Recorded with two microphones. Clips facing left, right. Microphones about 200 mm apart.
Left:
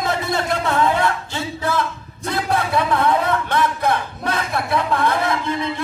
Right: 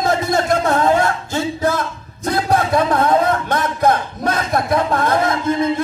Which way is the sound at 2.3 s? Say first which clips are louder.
Right 4 dB; 40° right (ahead or behind).